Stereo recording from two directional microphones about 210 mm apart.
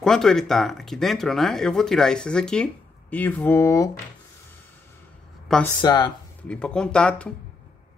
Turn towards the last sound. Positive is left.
turn(degrees=5)  # may be behind; listen again after turning